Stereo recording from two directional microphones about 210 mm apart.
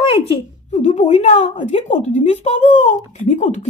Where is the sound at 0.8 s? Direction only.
35° left (ahead or behind).